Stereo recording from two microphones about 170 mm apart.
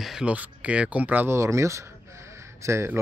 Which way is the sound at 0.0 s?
5° right (ahead or behind).